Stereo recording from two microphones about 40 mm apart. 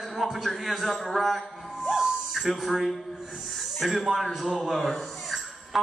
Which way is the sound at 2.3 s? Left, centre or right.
Centre.